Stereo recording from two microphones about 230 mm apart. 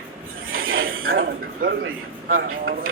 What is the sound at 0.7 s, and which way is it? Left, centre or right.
Speech, right.